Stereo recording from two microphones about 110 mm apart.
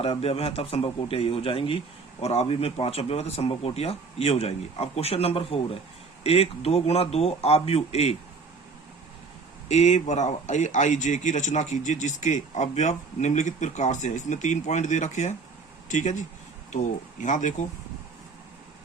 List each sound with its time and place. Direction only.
0.0 s speech: 65° left (ahead or behind)
2.2 s a man's voice: 70° left (ahead or behind)
9.6 s speech: 90° left
16.7 s speech: 90° left